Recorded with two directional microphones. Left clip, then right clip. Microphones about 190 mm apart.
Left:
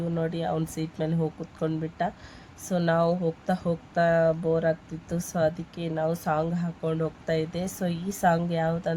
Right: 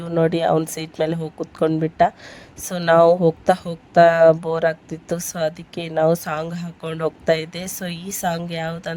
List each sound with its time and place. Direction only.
0.1 s speech: 40° right (ahead or behind)